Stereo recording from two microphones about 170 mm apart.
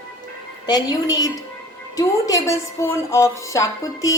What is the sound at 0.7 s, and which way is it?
A woman's voice, 25° left (ahead or behind).